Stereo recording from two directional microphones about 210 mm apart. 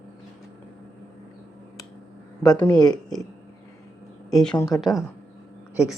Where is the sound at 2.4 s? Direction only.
15° left (ahead or behind).